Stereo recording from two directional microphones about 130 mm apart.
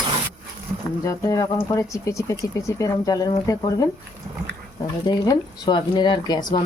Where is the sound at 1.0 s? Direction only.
25° left (ahead or behind).